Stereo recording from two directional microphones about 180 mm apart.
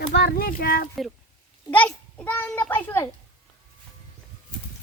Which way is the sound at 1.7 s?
10° left (ahead or behind).